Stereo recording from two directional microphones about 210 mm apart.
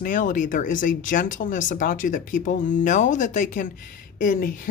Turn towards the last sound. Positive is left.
turn(degrees=40)  # may be behind; listen again after turning